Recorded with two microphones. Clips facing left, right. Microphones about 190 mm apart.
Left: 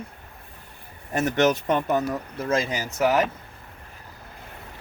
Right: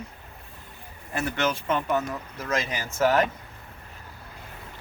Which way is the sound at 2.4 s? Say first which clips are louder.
Left 4 dB; 25° left (ahead or behind).